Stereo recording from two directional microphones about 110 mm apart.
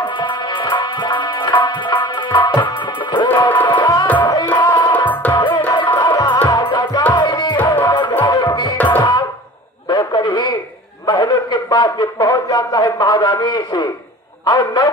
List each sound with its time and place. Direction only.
0.0 s music: 45° left (ahead or behind)
2.0 s tabla: 45° left (ahead or behind)
2.7 s music: 45° left (ahead or behind)
5.0 s music: 15° left (ahead or behind)
5.3 s music: 45° left (ahead or behind)
8.7 s music: 15° left (ahead or behind)
9.8 s a sound: 40° left (ahead or behind)
11.1 s speech: 40° left (ahead or behind)